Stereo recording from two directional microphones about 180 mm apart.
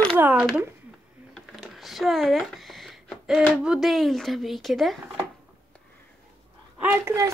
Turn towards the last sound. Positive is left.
turn(degrees=-15)  # may be behind; listen again after turning